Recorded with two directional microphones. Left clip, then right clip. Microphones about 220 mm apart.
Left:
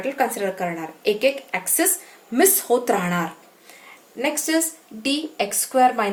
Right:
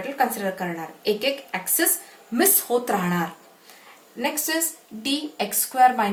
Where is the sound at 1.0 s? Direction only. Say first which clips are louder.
Left 4 dB; 45° left (ahead or behind).